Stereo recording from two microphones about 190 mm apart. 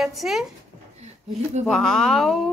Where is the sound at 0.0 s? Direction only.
Centre (ahead or behind).